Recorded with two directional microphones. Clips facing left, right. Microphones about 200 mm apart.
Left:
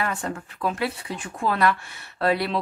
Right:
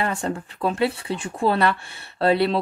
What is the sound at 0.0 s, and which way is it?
Speech, 30° right (ahead or behind).